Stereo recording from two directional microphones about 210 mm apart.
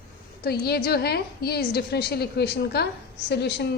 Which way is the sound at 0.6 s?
50° left (ahead or behind).